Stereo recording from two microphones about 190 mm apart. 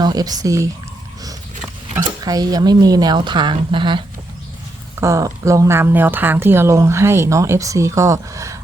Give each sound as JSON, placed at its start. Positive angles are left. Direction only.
{"t": 0.0, "sound": "a woman's voice", "side_deg": -20}
{"t": 2.2, "sound": "a woman's voice", "side_deg": -20}